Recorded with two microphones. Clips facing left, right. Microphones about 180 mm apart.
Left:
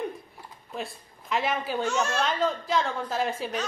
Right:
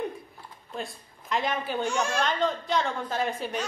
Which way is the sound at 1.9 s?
10° right (ahead or behind).